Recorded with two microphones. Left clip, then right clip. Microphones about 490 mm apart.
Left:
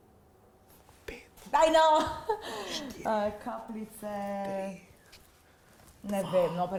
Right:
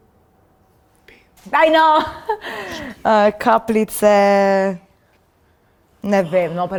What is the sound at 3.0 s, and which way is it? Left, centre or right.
A woman's voice, right.